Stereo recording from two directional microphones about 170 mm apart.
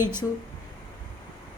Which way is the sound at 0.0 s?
15° right (ahead or behind).